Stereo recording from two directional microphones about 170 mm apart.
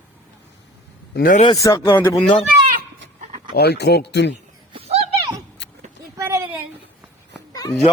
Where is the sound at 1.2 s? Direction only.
50° left (ahead or behind).